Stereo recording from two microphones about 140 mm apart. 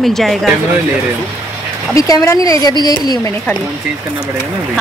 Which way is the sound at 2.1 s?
25° left (ahead or behind).